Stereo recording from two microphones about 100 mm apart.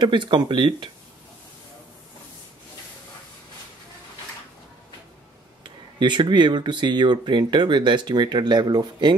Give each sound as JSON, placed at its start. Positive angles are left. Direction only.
{"t": 0.0, "sound": "speech", "side_deg": -50}
{"t": 5.6, "sound": "speech", "side_deg": -50}